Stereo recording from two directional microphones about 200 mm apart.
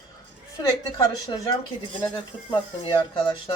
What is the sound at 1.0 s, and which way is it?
Speech, 20° left (ahead or behind).